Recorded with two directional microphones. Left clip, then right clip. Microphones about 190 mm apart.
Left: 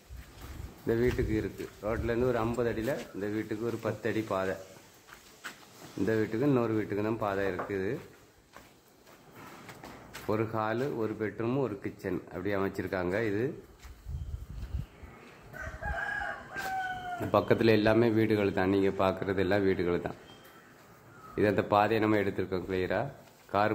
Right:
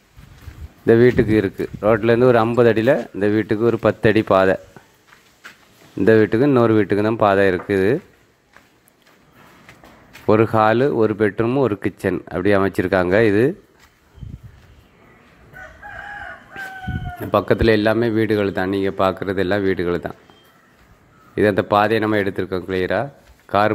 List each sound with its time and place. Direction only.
0.8 s speech: 40° right (ahead or behind)
5.9 s speech: 40° right (ahead or behind)
10.2 s speech: 40° right (ahead or behind)
17.2 s speech: 30° right (ahead or behind)
21.4 s speech: 30° right (ahead or behind)